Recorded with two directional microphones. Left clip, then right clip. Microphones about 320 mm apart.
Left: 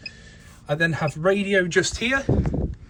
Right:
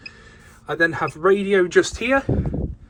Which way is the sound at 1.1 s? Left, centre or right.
Centre.